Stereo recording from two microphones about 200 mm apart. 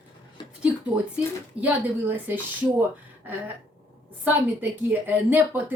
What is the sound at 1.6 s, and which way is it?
A woman's voice, 10° right (ahead or behind).